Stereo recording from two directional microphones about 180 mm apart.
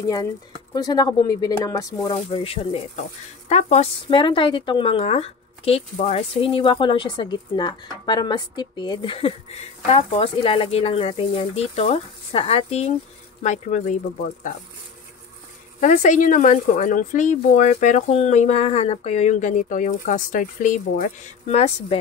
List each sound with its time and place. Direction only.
0.0 s speech: 20° left (ahead or behind); by 13.9 s 40° left (ahead or behind)
15.8 s speech: 45° left (ahead or behind)